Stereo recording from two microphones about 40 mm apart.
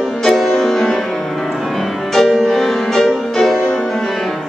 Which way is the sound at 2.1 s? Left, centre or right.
Centre.